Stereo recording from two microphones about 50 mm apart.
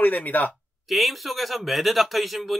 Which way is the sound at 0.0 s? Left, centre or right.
Left.